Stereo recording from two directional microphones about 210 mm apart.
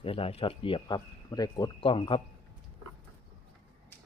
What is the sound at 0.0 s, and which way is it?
Speech, 25° left (ahead or behind).